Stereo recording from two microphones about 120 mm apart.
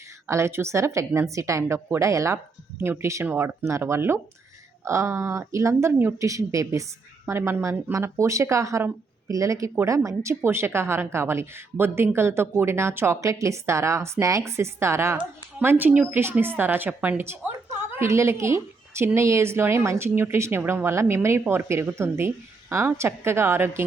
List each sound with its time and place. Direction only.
0.3 s a woman's voice: 20° right (ahead or behind)